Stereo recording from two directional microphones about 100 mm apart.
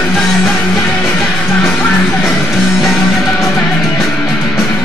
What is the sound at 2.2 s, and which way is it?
Music, centre (ahead or behind).